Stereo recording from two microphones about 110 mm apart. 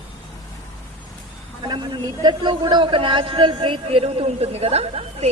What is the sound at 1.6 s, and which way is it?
A man's voice, 40° right (ahead or behind).